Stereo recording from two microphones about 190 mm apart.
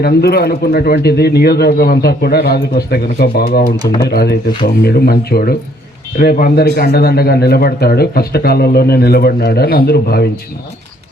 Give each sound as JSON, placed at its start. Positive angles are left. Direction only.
{"t": 0.0, "sound": "a man's voice", "side_deg": 55}